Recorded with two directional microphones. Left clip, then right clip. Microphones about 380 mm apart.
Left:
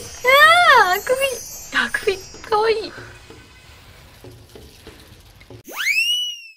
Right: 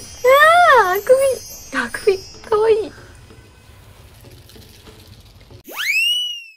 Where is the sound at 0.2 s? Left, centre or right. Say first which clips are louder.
Right 1 dB; centre.